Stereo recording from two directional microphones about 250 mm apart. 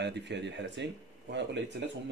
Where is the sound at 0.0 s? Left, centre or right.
Right.